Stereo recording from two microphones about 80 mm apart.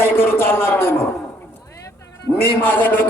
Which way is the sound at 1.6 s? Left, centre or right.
Left.